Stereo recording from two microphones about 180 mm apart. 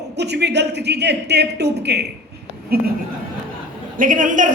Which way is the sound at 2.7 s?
55° right (ahead or behind).